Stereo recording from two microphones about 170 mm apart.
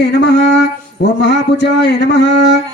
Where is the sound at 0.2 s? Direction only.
85° left.